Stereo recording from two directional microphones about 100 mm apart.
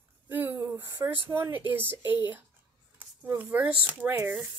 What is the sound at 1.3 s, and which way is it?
Speech, 20° right (ahead or behind).